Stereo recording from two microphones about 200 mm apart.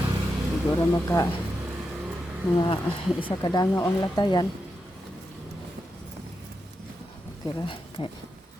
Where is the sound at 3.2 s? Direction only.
25° left (ahead or behind).